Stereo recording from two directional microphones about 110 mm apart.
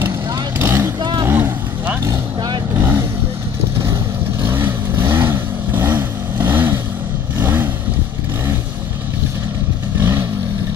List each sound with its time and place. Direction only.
0.6 s vehicle: 25° right (ahead or behind)
2.0 s vehicle: 40° right (ahead or behind)
2.7 s vehicle: 20° right (ahead or behind)
4.5 s vehicle: 20° right (ahead or behind)
9.9 s vehicle: 20° right (ahead or behind)